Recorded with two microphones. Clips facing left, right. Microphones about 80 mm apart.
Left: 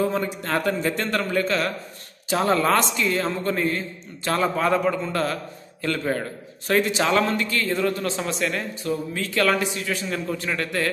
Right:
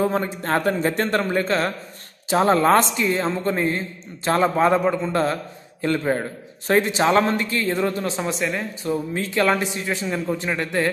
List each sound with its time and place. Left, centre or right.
0.0 s a man's voice: right